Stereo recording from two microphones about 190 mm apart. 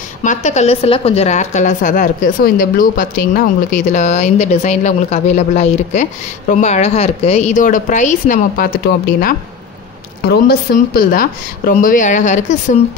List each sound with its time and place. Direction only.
0.2 s a woman's voice: 40° left (ahead or behind)
10.2 s a woman's voice: 55° left (ahead or behind); by 12.7 s 40° left (ahead or behind)